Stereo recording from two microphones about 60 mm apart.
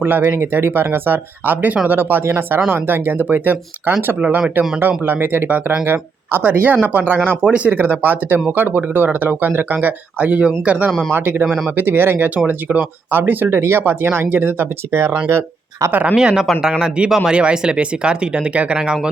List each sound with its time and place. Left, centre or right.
0.0 s speech: right
0.3 s speech: right
6.4 s speech: right
7.4 s speech: centre
7.7 s speech: right
11.4 s speech: centre
11.8 s speech: right
13.6 s speech: right
15.3 s speech: right
15.9 s speech: right
16.1 s speech: centre